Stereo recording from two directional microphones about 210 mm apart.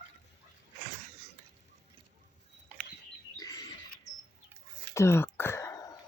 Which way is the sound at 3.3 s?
15° left (ahead or behind).